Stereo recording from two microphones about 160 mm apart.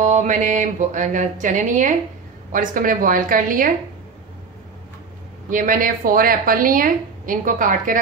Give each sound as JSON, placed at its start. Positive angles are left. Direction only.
{"t": 0.0, "sound": "a woman's voice", "side_deg": -50}
{"t": 5.5, "sound": "a woman's voice", "side_deg": -55}